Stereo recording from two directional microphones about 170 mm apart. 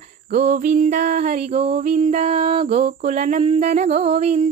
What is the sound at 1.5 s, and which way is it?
Music, 35° right (ahead or behind).